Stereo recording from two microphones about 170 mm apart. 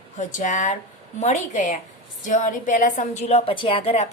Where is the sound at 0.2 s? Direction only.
50° left (ahead or behind).